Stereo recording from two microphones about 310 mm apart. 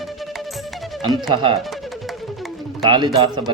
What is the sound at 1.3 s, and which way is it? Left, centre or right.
Speech, centre.